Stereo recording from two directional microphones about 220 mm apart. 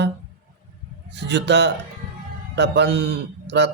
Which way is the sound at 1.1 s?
50° right (ahead or behind).